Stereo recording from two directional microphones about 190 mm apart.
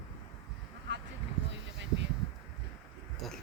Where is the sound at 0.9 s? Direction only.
70° right (ahead or behind).